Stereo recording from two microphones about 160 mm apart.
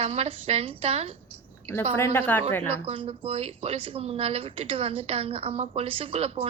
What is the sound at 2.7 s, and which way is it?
Speech, 35° right (ahead or behind).